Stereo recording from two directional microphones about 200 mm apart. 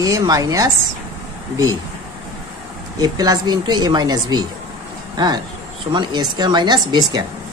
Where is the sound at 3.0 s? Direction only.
20° right (ahead or behind).